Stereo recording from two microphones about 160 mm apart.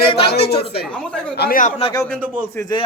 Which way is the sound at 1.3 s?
85° left.